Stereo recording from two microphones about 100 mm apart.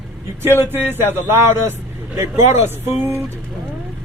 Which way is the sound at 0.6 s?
20° right (ahead or behind).